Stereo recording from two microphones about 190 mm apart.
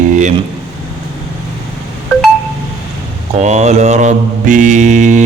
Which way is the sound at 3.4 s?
35° right (ahead or behind).